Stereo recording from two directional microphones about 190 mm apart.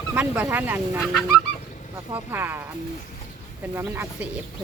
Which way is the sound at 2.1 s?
10° right (ahead or behind).